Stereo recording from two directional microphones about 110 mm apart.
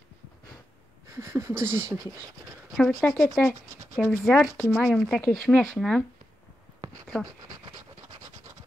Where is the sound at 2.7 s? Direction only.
Centre (ahead or behind).